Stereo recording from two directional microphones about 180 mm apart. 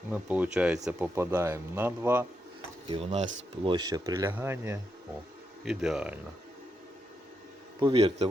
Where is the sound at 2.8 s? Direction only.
35° right (ahead or behind); by 4.8 s 10° right (ahead or behind).